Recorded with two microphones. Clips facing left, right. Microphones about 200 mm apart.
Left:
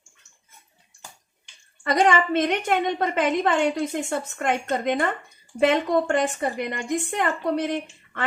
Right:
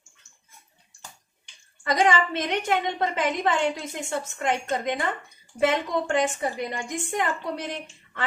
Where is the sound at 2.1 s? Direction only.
55° left (ahead or behind).